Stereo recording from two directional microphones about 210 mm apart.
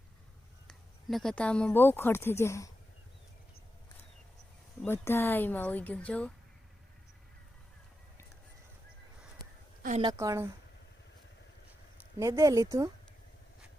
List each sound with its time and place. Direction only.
0.7 s speech: centre (ahead or behind)
4.8 s speech: 10° left (ahead or behind)
10.0 s speech: 15° right (ahead or behind)
12.2 s speech: 15° right (ahead or behind)